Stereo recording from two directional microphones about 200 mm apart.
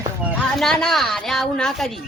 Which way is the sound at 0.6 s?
Centre (ahead or behind).